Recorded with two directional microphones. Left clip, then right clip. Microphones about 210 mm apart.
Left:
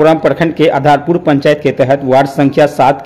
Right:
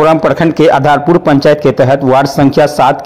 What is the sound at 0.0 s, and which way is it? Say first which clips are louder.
A man's voice: right 1 dB; 15° right (ahead or behind).